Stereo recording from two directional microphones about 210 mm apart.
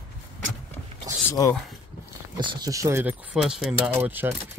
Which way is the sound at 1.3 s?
15° left (ahead or behind).